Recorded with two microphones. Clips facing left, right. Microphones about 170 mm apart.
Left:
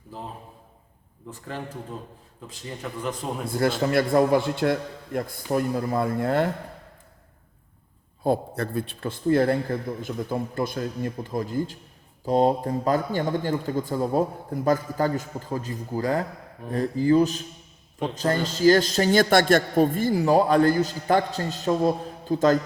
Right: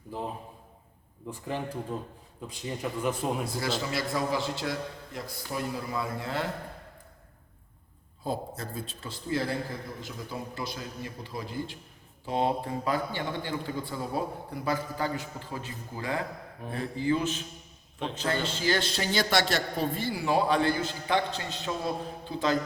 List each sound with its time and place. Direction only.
1.3 s a man's voice: 15° right (ahead or behind)
3.4 s a man's voice: 55° left (ahead or behind)
8.2 s a man's voice: 60° left (ahead or behind); by 22.5 s 45° left (ahead or behind)